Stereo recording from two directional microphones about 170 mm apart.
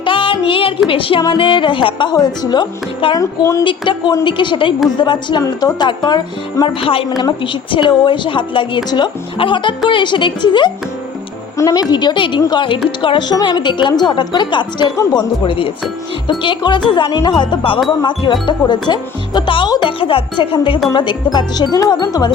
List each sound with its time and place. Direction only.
0.0 s music: 30° left (ahead or behind)
0.9 s a woman's voice: 30° left (ahead or behind)